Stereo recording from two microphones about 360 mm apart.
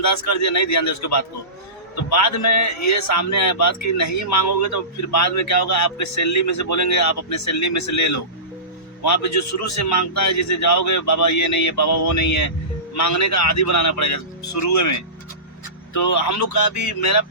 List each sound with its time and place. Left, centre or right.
0.0 s a man's voice: left